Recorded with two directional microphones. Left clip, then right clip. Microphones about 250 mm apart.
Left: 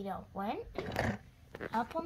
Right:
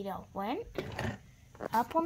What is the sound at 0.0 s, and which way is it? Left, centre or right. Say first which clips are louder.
Speech: right 2 dB; right.